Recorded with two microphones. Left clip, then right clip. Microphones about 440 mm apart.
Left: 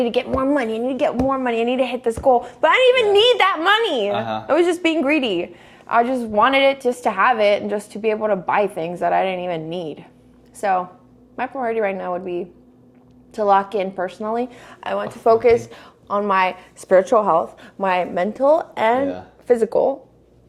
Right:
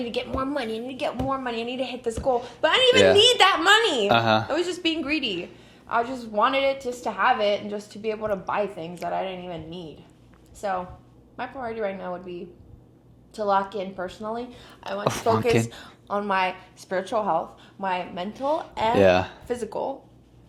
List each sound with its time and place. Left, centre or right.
0.0 s a woman's voice: left
4.1 s speech: right
4.4 s a woman's voice: left
15.2 s a woman's voice: centre
16.9 s a woman's voice: left